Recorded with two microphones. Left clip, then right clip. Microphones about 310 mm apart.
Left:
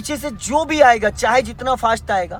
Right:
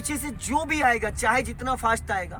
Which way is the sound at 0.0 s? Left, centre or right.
Centre.